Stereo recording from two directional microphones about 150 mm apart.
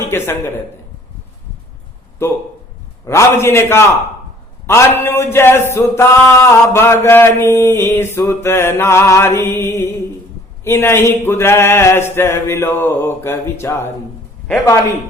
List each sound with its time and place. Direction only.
0.0 s a man's voice: 15° left (ahead or behind)
2.2 s a sound: 15° left (ahead or behind)
14.4 s a man's voice: 20° left (ahead or behind)